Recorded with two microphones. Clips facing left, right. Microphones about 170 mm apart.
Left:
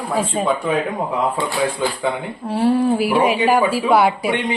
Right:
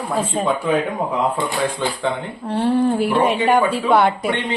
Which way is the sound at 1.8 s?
5° left (ahead or behind).